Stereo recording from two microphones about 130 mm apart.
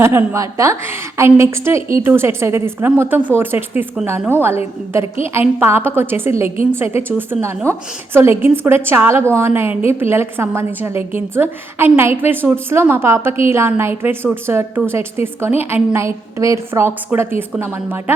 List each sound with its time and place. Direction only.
0.0 s a woman's voice: 20° right (ahead or behind)
5.2 s a woman's voice: 15° right (ahead or behind)